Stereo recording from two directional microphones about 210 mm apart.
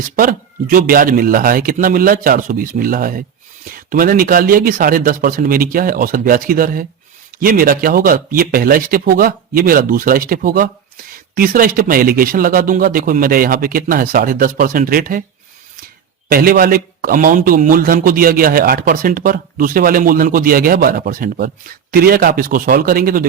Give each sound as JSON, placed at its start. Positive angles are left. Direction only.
{"t": 0.2, "sound": "a man's voice", "side_deg": -40}
{"t": 16.3, "sound": "a man's voice", "side_deg": -45}